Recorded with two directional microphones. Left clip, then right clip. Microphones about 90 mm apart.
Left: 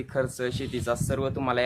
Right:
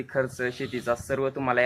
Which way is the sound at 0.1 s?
20° left (ahead or behind).